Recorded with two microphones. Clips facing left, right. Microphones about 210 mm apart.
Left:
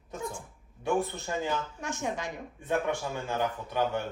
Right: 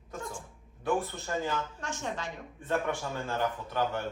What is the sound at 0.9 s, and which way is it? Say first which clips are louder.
Speech: left 1 dB; 15° left (ahead or behind).